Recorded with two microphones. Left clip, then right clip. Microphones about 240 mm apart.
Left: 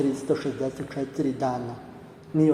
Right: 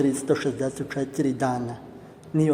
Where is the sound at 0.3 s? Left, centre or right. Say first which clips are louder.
Right 2 dB; right.